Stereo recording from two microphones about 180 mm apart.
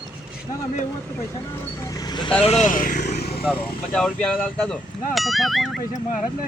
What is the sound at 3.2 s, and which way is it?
Vehicle, 60° left (ahead or behind).